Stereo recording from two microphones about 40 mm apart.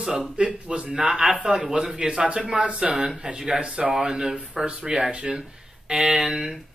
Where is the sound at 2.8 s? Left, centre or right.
Centre.